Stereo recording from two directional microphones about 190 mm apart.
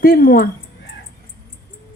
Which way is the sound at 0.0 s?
50° left (ahead or behind).